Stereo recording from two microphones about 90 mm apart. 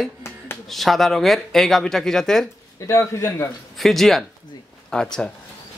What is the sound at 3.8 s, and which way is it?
Speech, centre (ahead or behind).